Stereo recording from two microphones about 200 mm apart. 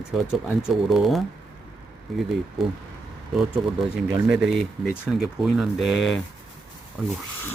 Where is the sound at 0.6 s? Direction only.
Centre (ahead or behind).